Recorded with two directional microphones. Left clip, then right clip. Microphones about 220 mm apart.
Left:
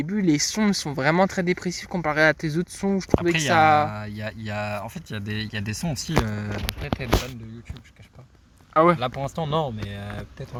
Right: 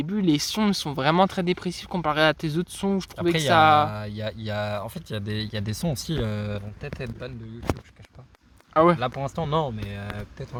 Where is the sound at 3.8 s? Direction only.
40° right (ahead or behind).